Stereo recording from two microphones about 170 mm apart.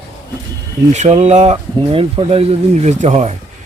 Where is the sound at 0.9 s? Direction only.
40° right (ahead or behind).